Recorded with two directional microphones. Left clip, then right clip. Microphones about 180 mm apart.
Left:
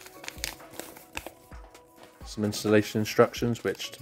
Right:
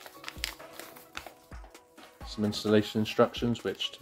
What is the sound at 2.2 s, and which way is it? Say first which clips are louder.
Speech: left 2 dB; 40° left (ahead or behind).